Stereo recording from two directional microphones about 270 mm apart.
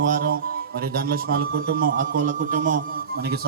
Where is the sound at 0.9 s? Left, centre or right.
Right.